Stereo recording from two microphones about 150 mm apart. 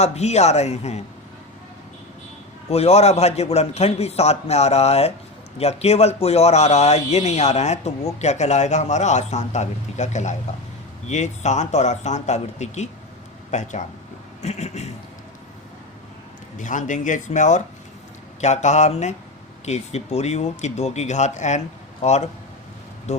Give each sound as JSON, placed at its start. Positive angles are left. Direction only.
{"t": 0.0, "sound": "a man's voice", "side_deg": 45}
{"t": 2.6, "sound": "a man's voice", "side_deg": 45}
{"t": 16.6, "sound": "a man's voice", "side_deg": 55}